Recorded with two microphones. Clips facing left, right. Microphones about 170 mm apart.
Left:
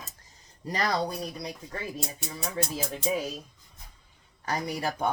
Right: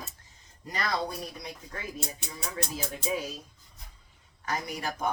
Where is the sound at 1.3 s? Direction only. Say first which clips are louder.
Left 4 dB; 35° left (ahead or behind).